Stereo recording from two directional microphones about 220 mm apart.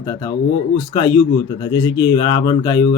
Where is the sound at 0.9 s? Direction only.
20° left (ahead or behind).